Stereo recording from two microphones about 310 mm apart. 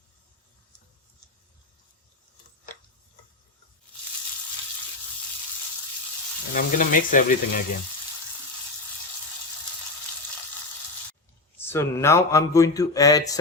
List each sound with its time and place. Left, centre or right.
6.5 s speech: left
11.6 s speech: centre